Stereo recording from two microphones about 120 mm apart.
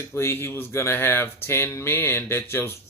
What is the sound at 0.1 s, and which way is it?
Speech, 20° left (ahead or behind).